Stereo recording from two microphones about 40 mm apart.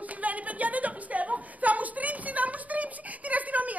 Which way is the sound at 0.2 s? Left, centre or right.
Right.